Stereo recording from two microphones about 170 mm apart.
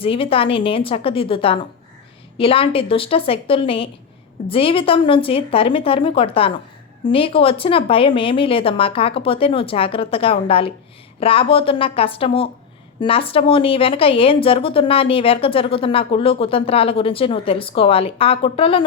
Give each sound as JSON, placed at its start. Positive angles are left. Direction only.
{"t": 0.0, "sound": "a woman's voice", "side_deg": 30}